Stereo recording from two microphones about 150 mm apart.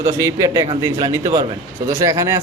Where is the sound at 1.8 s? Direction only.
20° right (ahead or behind).